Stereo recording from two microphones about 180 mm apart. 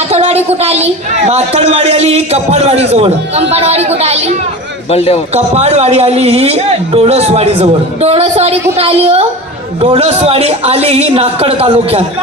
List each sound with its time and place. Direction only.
0.1 s a sound: 35° right (ahead or behind)
1.3 s a man's voice: 35° right (ahead or behind)
4.9 s a man's voice: 35° left (ahead or behind)
5.3 s a man's voice: 35° right (ahead or behind)